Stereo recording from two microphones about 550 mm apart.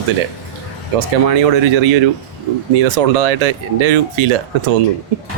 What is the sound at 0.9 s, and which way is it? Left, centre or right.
Speech, right.